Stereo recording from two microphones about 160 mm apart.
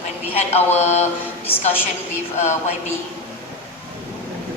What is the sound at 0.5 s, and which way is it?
Speech, 45° left (ahead or behind).